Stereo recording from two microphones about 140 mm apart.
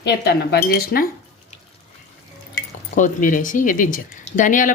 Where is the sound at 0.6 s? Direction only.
90° left.